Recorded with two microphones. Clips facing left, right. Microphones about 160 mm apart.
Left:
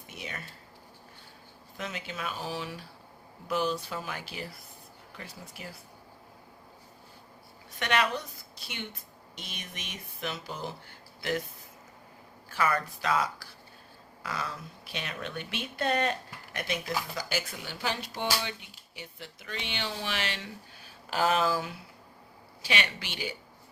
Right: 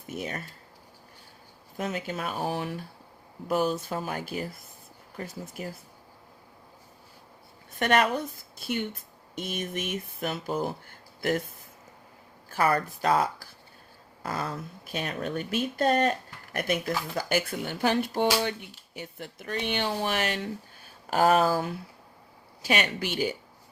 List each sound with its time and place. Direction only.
0.1 s speech: 45° right (ahead or behind)
1.8 s speech: 45° right (ahead or behind)
2.3 s speech: 55° right (ahead or behind)
7.8 s speech: 45° right (ahead or behind)
12.5 s speech: 40° right (ahead or behind)